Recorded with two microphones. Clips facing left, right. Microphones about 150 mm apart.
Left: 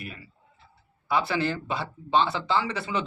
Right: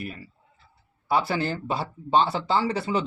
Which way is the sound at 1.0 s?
40° right (ahead or behind).